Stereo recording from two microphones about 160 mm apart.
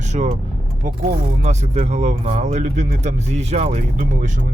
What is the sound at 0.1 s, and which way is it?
Speech, 45° right (ahead or behind).